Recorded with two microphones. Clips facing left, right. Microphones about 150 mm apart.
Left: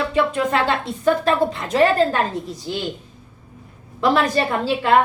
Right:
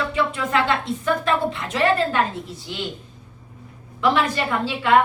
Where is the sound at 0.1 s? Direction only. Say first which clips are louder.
Left 3 dB; 35° left (ahead or behind).